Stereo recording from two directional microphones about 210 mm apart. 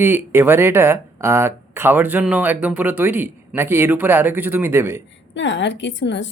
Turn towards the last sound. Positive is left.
turn(degrees=60)  # may be behind; listen again after turning